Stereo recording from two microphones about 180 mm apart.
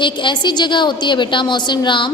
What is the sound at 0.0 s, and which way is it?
A woman's voice, 25° left (ahead or behind).